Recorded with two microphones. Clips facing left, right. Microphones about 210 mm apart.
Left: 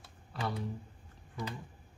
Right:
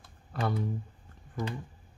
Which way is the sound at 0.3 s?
50° right (ahead or behind).